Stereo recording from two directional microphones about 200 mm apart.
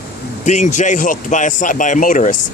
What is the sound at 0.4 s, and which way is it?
Speech, 35° left (ahead or behind).